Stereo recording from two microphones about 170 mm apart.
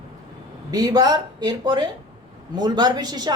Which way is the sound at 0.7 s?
20° right (ahead or behind).